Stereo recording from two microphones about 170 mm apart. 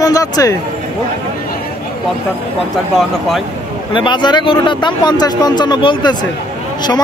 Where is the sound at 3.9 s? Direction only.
30° left (ahead or behind).